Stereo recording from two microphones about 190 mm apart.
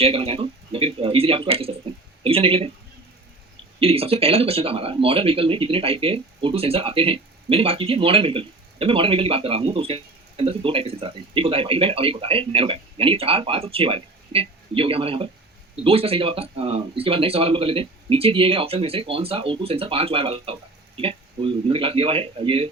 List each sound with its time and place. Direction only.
0.0 s speech: 30° right (ahead or behind)
3.8 s speech: 30° right (ahead or behind)